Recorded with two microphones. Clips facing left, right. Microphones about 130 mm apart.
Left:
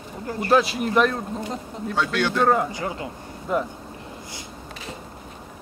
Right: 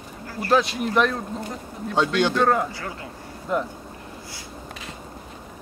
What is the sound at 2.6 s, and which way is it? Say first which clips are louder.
Speech: left 5 dB; 20° left (ahead or behind).